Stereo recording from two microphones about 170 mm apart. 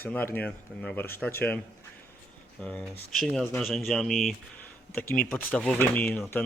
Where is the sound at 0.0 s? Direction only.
10° left (ahead or behind).